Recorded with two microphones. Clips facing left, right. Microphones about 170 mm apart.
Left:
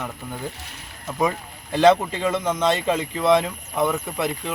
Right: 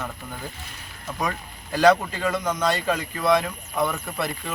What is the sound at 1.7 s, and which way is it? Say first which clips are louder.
Speech: left 2 dB; 25° left (ahead or behind).